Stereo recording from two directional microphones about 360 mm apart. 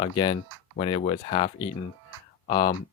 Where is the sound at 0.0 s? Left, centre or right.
Centre.